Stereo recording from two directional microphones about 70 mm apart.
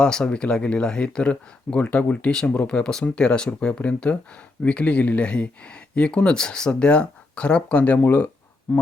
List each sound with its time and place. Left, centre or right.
0.0 s speech: centre